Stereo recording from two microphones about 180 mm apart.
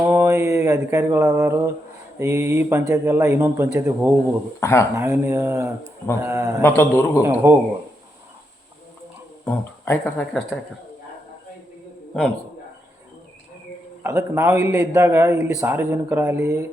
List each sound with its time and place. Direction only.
0.0 s mantra: 15° right (ahead or behind)
2.1 s speech: 15° right (ahead or behind)
4.6 s a man's voice: 15° left (ahead or behind)
4.9 s speech: 15° right (ahead or behind)
6.6 s a man's voice: 15° left (ahead or behind)
7.2 s speech: 15° right (ahead or behind)
9.4 s speech: 10° left (ahead or behind)
14.0 s speech: 15° right (ahead or behind)